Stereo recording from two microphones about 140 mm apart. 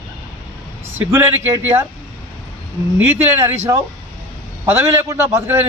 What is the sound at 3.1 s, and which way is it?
Speech, 15° right (ahead or behind).